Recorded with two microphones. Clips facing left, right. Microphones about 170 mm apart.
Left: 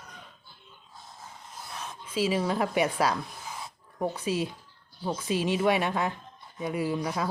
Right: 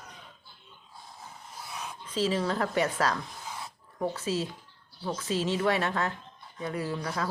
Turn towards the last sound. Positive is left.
turn(degrees=15)  # may be behind; listen again after turning